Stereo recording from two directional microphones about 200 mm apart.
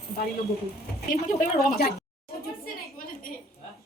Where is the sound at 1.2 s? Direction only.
45° left (ahead or behind).